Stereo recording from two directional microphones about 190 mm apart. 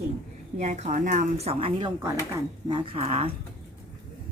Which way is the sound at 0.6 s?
35° right (ahead or behind).